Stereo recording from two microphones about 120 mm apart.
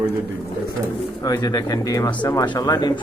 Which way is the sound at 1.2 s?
30° left (ahead or behind).